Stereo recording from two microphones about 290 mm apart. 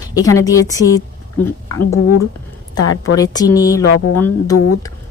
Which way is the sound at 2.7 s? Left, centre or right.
Left.